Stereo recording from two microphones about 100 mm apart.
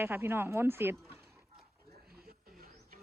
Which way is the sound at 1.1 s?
25° right (ahead or behind).